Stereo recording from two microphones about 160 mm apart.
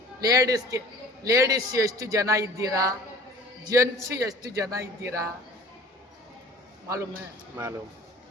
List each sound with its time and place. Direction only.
0.2 s a man's voice: 20° right (ahead or behind)
6.8 s a man's voice: 20° right (ahead or behind)